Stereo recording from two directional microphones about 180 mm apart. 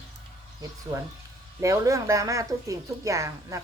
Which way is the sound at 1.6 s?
20° right (ahead or behind).